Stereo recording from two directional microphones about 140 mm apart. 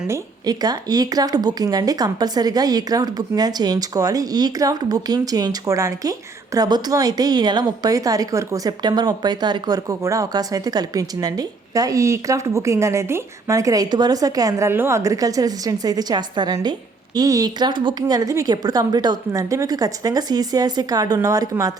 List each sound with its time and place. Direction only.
0.1 s speech: 25° right (ahead or behind)